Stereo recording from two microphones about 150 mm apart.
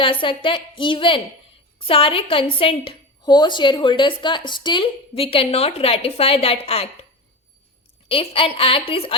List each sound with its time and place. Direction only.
0.0 s a woman's voice: 35° left (ahead or behind)
8.0 s a woman's voice: 40° left (ahead or behind)